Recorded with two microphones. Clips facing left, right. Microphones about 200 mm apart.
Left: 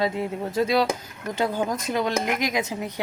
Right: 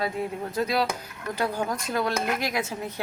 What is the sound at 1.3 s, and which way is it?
A woman's voice, 20° left (ahead or behind).